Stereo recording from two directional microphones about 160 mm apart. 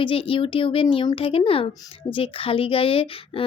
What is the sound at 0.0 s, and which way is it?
Speech, 35° left (ahead or behind).